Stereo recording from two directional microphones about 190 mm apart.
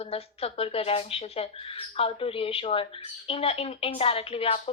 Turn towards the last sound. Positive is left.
turn(degrees=30)  # may be behind; listen again after turning